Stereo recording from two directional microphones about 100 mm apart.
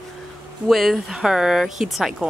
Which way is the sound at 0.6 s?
Centre (ahead or behind).